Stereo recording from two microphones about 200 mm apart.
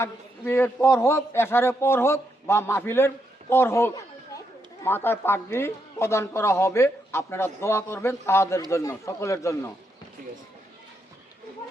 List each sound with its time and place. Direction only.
0.0 s speech: 10° left (ahead or behind)